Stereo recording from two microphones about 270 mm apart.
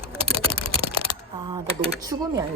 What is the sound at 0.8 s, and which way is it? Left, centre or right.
Speech, right.